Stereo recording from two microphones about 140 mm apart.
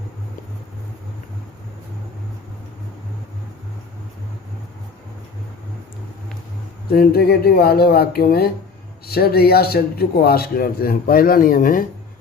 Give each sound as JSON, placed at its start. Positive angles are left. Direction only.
{"t": 6.9, "sound": "speech", "side_deg": 90}